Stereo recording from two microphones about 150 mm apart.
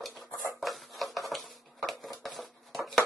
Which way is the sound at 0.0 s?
Centre (ahead or behind).